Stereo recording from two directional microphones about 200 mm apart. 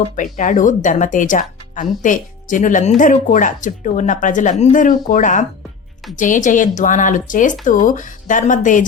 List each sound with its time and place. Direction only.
0.3 s speech: 40° left (ahead or behind)